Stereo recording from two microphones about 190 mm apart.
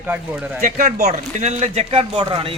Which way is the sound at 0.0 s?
10° right (ahead or behind).